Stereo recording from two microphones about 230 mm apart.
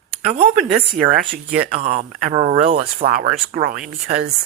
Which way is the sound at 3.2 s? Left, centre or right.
Right.